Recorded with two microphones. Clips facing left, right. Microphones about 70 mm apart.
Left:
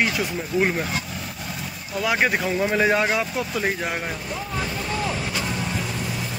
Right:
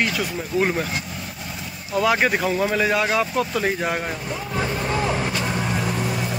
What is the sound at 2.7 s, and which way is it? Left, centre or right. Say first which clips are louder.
Speech: left 1 dB; left.